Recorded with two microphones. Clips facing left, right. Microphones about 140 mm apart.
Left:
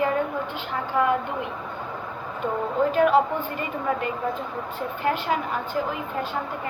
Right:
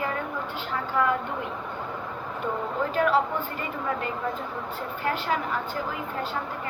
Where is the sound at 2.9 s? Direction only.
20° left (ahead or behind).